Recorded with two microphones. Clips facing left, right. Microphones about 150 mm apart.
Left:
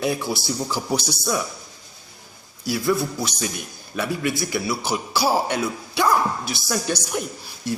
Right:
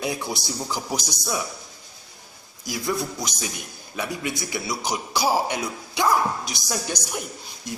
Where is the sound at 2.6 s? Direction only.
15° right (ahead or behind).